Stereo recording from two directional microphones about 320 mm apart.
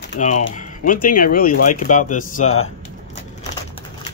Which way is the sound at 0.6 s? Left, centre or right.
Left.